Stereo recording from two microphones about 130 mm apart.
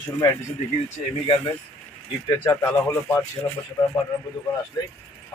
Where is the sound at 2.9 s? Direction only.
25° left (ahead or behind).